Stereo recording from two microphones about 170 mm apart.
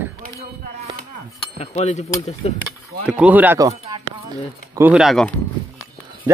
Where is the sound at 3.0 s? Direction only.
10° right (ahead or behind).